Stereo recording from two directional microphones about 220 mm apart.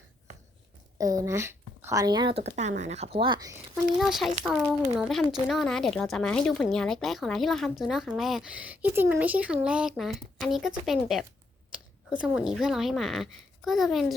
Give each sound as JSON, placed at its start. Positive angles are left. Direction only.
{"t": 0.9, "sound": "speech", "side_deg": -15}
{"t": 3.9, "sound": "speech", "side_deg": 0}